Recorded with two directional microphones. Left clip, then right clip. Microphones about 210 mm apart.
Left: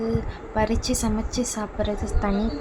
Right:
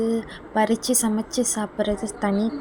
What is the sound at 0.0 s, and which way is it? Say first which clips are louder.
A woman's voice: right 3 dB; 20° right (ahead or behind).